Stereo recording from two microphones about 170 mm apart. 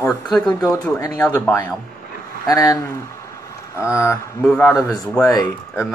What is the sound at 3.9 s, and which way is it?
Speech, 15° left (ahead or behind).